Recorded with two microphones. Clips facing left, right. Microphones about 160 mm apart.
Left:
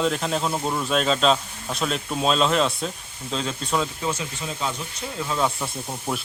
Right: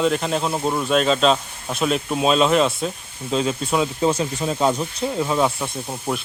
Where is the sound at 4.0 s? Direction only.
35° right (ahead or behind).